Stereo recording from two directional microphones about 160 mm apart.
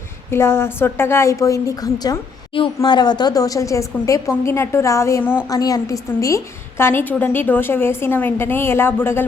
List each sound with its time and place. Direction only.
0.3 s a woman's voice: 15° left (ahead or behind)